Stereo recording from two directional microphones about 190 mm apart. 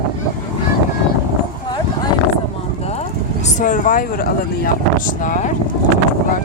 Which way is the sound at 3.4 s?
45° left (ahead or behind).